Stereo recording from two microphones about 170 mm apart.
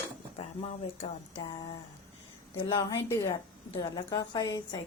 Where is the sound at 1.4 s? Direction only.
25° left (ahead or behind).